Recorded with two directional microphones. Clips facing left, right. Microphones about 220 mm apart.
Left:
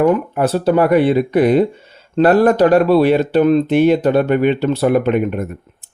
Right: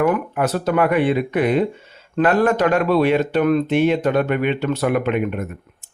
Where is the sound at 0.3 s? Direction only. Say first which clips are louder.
Left 5 dB; 30° left (ahead or behind).